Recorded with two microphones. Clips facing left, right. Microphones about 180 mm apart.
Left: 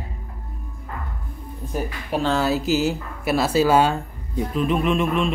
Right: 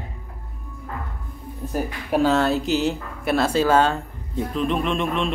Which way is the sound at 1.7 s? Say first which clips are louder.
Right 2 dB; 5° right (ahead or behind).